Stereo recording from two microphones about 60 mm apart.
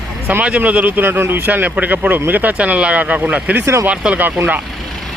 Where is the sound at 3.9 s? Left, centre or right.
Right.